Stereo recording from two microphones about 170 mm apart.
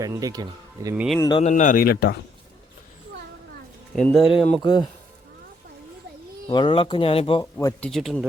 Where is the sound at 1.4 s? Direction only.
45° left (ahead or behind); by 2.1 s 65° left (ahead or behind).